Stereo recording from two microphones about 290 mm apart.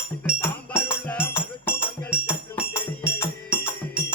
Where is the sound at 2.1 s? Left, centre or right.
Centre.